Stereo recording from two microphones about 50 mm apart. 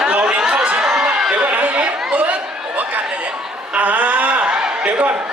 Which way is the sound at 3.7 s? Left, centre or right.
Right.